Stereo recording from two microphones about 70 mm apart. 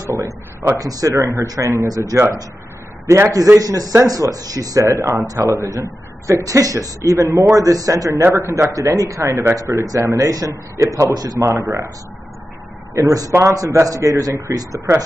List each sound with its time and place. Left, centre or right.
0.0 s a sound: right
0.7 s a man's voice: right
3.5 s a man's voice: right
8.2 s a man's voice: right
8.5 s a man's voice: right
9.6 s a man's voice: right
13.0 s a man's voice: right